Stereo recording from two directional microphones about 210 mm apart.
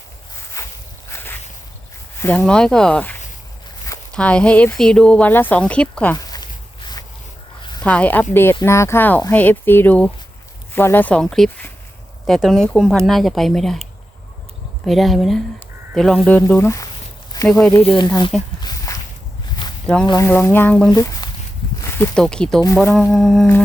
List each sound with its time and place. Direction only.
0.6 s walk: 15° left (ahead or behind)
1.1 s a sound: 10° left (ahead or behind)
2.4 s speech: 5° left (ahead or behind)
6.2 s a sound: 20° left (ahead or behind)
7.9 s speech: 5° left (ahead or behind)
14.8 s speech: centre (ahead or behind); by 18.1 s 25° left (ahead or behind)
18.6 s walk: 15° left (ahead or behind)
20.1 s speech: 15° left (ahead or behind)
20.9 s speech: 15° left (ahead or behind); by 23.5 s centre (ahead or behind)